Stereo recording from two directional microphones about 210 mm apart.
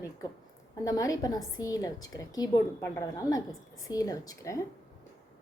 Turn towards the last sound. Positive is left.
turn(degrees=15)  # may be behind; listen again after turning